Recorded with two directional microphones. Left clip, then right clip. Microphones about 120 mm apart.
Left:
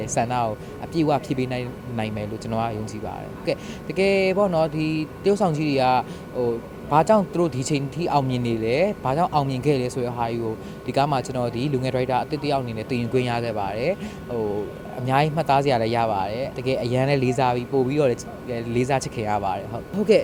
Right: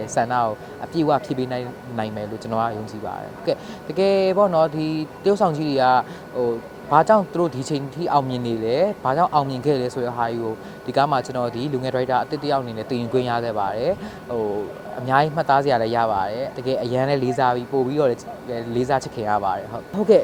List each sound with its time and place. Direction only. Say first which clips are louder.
0.0 s speech: right 3 dB; 20° right (ahead or behind)
15.0 s speech: right 3 dB; 20° right (ahead or behind)